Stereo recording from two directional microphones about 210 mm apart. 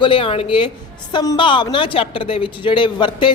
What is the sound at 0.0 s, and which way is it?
Speech, 25° left (ahead or behind).